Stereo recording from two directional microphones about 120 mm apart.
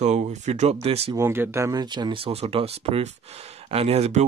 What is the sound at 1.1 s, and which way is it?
Speech, 20° right (ahead or behind).